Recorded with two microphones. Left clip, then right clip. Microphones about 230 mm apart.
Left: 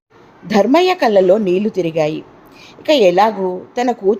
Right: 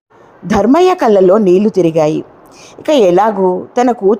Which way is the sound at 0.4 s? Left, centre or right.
Right.